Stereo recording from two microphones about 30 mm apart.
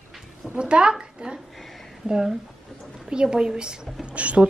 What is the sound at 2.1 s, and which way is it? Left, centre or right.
A woman's voice, centre.